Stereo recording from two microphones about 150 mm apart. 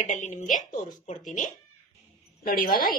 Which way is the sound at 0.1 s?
55° left (ahead or behind).